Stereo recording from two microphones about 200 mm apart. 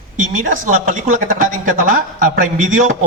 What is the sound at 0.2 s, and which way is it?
Speech, 40° right (ahead or behind).